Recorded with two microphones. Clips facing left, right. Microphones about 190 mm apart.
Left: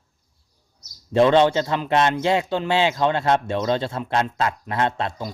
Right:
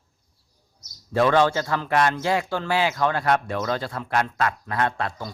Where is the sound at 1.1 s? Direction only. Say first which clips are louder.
Left 3 dB; 20° left (ahead or behind).